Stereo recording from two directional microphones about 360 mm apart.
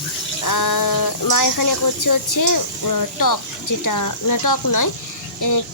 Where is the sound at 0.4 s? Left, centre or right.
Left.